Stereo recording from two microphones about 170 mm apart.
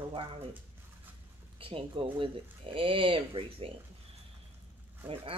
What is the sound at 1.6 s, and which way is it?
Speech, 30° right (ahead or behind).